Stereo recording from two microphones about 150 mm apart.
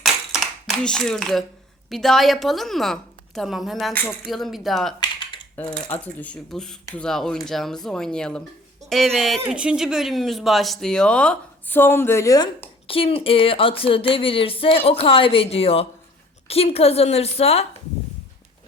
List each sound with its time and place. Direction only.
0.7 s speech: 5° left (ahead or behind)
5.6 s speech: 10° left (ahead or behind)
12.9 s a woman's voice: 40° left (ahead or behind)